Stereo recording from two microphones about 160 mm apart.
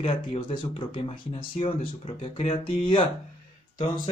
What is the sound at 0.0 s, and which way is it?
Speech, 35° left (ahead or behind).